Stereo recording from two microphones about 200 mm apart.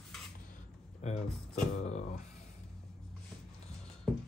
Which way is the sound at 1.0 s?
35° left (ahead or behind).